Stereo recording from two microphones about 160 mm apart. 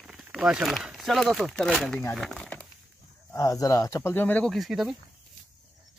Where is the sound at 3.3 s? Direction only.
20° left (ahead or behind); by 4.9 s centre (ahead or behind).